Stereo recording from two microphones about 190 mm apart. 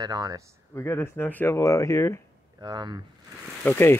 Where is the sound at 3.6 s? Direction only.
10° left (ahead or behind).